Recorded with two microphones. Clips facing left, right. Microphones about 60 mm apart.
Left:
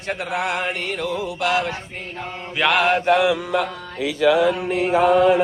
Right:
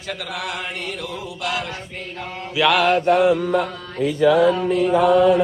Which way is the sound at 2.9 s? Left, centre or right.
Left.